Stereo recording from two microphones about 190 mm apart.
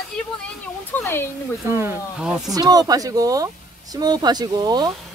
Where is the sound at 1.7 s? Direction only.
10° right (ahead or behind).